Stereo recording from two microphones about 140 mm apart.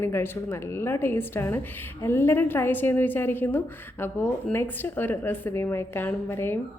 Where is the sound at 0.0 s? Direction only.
15° left (ahead or behind).